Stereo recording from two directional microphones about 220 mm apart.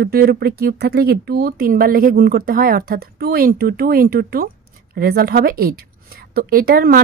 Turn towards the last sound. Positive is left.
turn(degrees=-40)  # may be behind; listen again after turning